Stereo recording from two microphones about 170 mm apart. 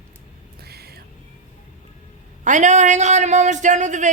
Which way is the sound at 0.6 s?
70° right (ahead or behind).